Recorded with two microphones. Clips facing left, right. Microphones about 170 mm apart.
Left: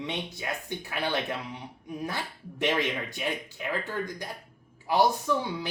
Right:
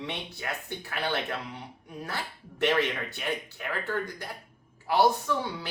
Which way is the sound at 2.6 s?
15° left (ahead or behind).